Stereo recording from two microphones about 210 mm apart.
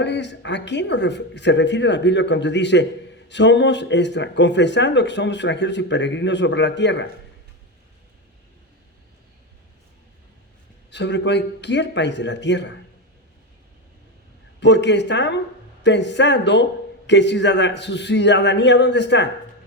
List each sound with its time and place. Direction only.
0.0 s speech: 55° left (ahead or behind)
10.9 s speech: 55° left (ahead or behind)
14.6 s speech: 55° left (ahead or behind)